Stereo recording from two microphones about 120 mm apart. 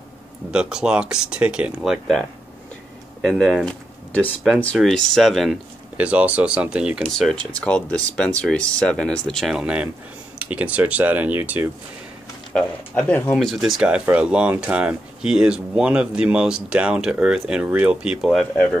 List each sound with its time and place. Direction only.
0.5 s speech: 5° right (ahead or behind)
5.9 s speech: 10° right (ahead or behind)
7.1 s speech: centre (ahead or behind)
9.6 s speech: 10° right (ahead or behind)
12.5 s speech: 10° left (ahead or behind)